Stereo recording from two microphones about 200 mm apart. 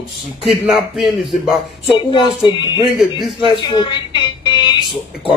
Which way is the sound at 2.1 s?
20° left (ahead or behind).